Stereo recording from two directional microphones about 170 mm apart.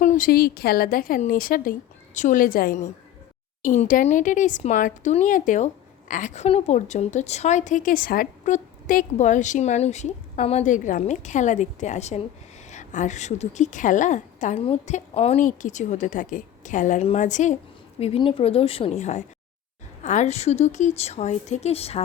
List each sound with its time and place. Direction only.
0.0 s a woman's voice: 50° left (ahead or behind)
18.0 s a woman's voice: 35° left (ahead or behind)